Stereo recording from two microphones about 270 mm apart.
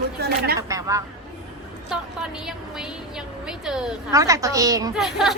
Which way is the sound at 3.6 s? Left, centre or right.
Centre.